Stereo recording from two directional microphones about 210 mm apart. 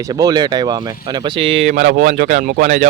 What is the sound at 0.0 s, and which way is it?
Speech, 20° right (ahead or behind).